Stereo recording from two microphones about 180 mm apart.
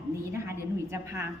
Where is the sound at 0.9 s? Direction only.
15° right (ahead or behind).